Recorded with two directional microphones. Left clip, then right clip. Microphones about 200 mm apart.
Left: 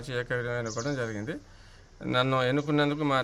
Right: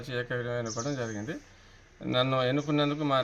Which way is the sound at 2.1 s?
30° left (ahead or behind).